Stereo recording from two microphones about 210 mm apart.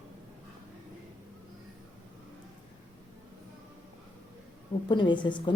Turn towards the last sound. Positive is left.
turn(degrees=20)  # may be behind; listen again after turning